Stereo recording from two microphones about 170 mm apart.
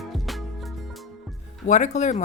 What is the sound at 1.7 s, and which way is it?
Speech, 45° left (ahead or behind).